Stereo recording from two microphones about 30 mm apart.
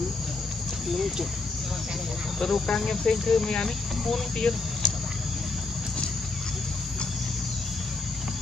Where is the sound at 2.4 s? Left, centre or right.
Centre.